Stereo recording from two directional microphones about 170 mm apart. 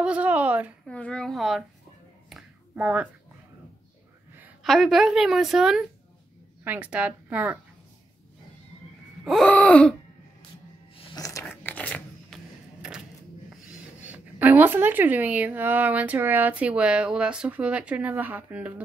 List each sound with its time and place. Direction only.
0.0 s a sound: 5° right (ahead or behind)
0.8 s a woman's voice: 5° left (ahead or behind)
2.7 s speech: 10° right (ahead or behind)
4.6 s a woman's voice: centre (ahead or behind)
9.2 s gasp: centre (ahead or behind)
11.1 s a sound: 20° left (ahead or behind)
11.6 s scissors: 10° left (ahead or behind)
13.7 s speech: 10° right (ahead or behind)